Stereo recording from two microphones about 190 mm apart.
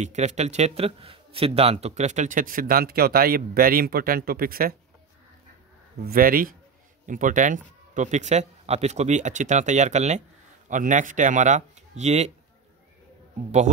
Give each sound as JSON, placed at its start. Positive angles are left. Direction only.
{"t": 0.0, "sound": "speech", "side_deg": -35}
{"t": 6.0, "sound": "speech", "side_deg": -50}